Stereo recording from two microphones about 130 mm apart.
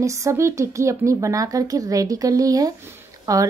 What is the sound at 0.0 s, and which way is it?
Speech, 25° right (ahead or behind).